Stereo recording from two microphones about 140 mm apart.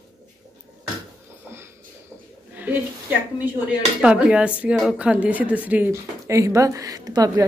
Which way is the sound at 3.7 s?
5° right (ahead or behind).